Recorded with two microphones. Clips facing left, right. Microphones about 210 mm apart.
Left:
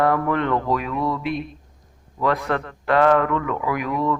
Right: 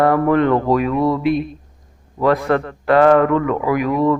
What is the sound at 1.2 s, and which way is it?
Speech, 5° right (ahead or behind).